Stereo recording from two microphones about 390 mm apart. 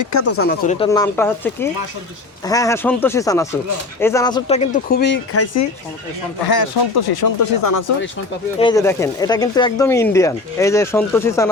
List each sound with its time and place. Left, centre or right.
0.0 s speech: left
0.4 s speech: centre; by 5.6 s left
6.5 s speech: left
8.5 s speech: centre